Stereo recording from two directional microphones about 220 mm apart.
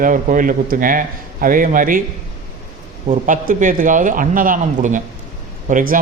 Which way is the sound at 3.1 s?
35° right (ahead or behind).